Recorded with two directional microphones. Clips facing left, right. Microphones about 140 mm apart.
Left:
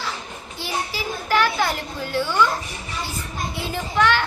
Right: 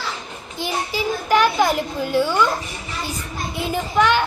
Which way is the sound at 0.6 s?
15° right (ahead or behind).